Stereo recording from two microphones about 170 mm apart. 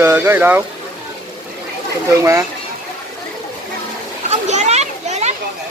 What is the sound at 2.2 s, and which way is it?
Speech, 15° right (ahead or behind).